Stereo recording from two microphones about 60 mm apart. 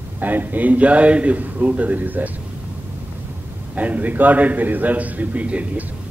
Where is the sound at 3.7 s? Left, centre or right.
Right.